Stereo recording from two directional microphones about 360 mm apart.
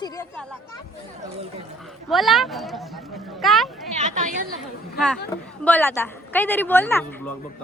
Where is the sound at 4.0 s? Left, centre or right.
Centre.